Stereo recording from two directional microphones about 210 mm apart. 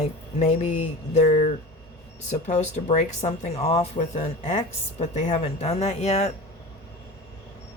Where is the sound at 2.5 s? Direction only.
35° left (ahead or behind).